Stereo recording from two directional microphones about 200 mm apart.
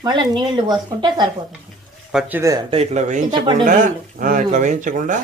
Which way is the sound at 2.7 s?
35° right (ahead or behind).